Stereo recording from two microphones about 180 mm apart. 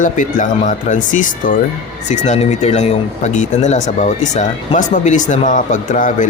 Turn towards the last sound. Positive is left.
turn(degrees=45)  # may be behind; listen again after turning